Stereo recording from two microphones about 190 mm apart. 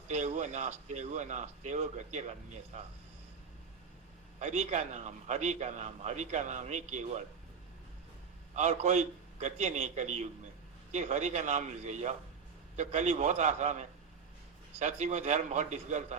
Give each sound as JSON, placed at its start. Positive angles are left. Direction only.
{"t": 0.1, "sound": "a man's voice", "side_deg": -35}
{"t": 4.4, "sound": "a man's voice", "side_deg": -40}
{"t": 8.5, "sound": "a man's voice", "side_deg": -35}